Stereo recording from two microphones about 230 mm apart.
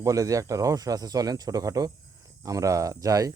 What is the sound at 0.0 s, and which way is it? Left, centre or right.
Speech, centre.